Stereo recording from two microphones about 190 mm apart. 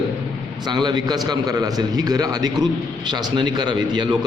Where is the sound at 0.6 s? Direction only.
20° right (ahead or behind).